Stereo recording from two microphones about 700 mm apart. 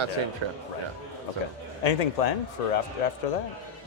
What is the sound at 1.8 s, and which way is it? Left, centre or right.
Speech, left.